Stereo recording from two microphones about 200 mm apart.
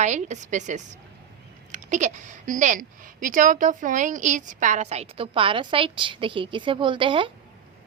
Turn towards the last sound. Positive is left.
turn(degrees=-25)  # may be behind; listen again after turning